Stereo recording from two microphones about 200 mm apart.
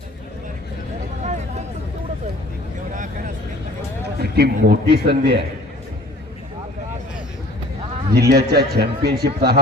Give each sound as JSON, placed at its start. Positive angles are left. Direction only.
{"t": 1.2, "sound": "a sound", "side_deg": -35}
{"t": 2.9, "sound": "vehicle", "side_deg": -40}
{"t": 4.2, "sound": "a man's voice", "side_deg": -50}
{"t": 8.1, "sound": "a man's voice", "side_deg": -50}